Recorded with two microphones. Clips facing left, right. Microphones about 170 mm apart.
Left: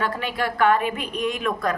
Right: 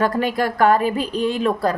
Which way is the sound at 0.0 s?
40° right (ahead or behind).